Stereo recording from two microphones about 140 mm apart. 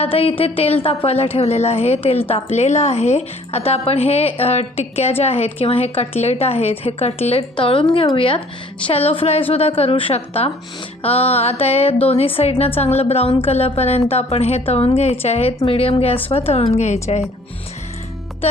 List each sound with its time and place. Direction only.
0.0 s a woman's voice: 45° left (ahead or behind)